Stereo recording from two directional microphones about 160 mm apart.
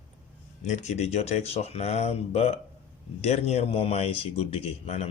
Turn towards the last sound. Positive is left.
turn(degrees=40)  # may be behind; listen again after turning